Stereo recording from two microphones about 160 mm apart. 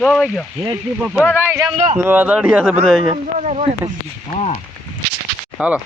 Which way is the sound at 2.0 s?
10° right (ahead or behind).